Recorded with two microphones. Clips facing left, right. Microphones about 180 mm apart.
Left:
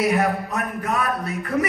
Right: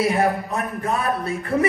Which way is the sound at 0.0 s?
30° right (ahead or behind).